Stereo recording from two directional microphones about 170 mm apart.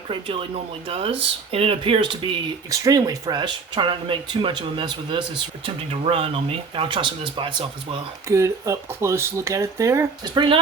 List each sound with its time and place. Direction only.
0.1 s speech: 30° right (ahead or behind)
2.6 s speech: 20° right (ahead or behind)
8.3 s speech: 15° right (ahead or behind)
10.3 s speech: 30° right (ahead or behind)